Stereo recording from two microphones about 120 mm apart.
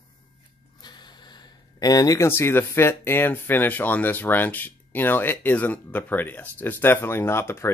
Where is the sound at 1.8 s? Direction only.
30° left (ahead or behind).